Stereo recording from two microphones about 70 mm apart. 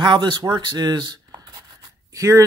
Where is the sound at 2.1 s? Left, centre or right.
Right.